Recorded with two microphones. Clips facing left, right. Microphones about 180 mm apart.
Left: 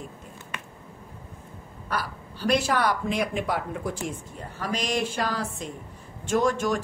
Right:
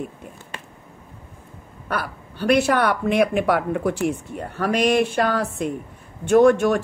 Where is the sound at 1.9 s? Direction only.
60° right (ahead or behind).